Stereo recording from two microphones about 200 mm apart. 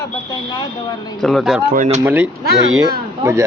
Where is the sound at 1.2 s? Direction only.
Centre (ahead or behind).